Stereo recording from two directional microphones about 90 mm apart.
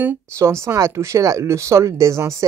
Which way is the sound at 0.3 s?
30° right (ahead or behind).